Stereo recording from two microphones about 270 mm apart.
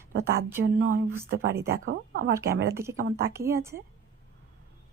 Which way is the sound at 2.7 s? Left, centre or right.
Centre.